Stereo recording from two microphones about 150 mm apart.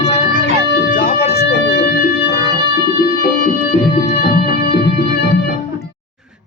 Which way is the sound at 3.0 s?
80° left.